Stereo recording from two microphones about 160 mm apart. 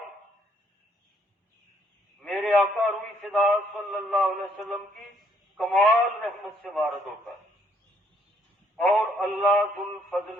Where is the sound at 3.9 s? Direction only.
5° left (ahead or behind).